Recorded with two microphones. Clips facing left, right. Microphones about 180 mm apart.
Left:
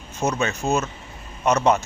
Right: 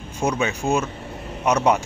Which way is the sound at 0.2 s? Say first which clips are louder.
Right 1 dB; 10° right (ahead or behind).